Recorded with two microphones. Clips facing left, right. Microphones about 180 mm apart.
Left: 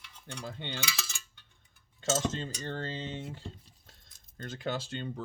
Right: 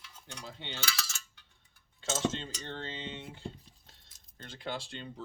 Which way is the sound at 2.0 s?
45° left (ahead or behind).